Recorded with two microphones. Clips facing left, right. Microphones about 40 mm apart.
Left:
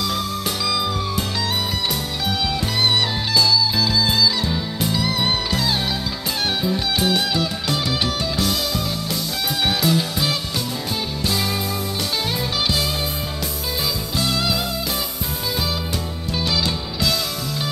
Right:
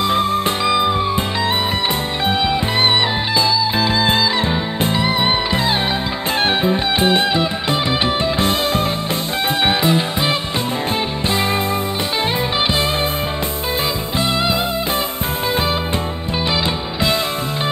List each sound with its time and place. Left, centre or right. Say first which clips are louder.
0.7 s music: right 7 dB; right
3.3 s music: even; right
6.6 s music: right 5 dB; right